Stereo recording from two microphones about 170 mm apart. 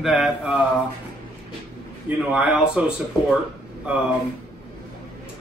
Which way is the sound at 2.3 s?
10° right (ahead or behind).